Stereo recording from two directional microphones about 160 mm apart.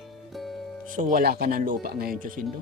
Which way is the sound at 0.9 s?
60° right (ahead or behind).